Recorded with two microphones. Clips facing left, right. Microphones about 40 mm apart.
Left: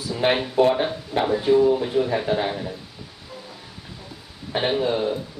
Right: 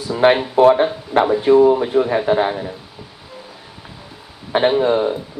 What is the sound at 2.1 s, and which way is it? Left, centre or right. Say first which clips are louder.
Speech: right 6 dB; right.